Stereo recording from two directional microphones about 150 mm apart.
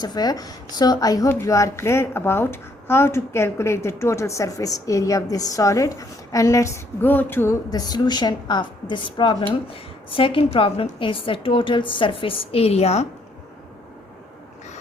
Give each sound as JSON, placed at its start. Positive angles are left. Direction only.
{"t": 0.0, "sound": "a woman's voice", "side_deg": 25}
{"t": 7.7, "sound": "a woman's voice", "side_deg": 25}